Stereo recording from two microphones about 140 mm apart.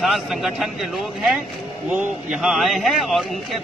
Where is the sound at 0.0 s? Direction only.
Centre (ahead or behind).